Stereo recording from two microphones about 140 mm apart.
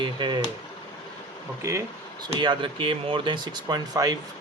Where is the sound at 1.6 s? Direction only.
20° right (ahead or behind).